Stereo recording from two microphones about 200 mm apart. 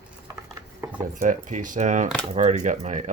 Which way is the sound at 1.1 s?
40° right (ahead or behind).